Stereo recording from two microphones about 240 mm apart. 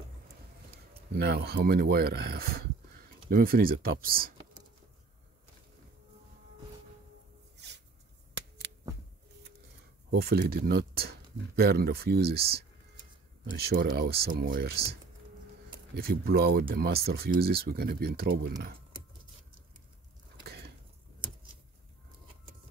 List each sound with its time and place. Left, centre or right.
1.1 s speech: right
10.1 s speech: right
15.9 s speech: right
20.4 s a sound: right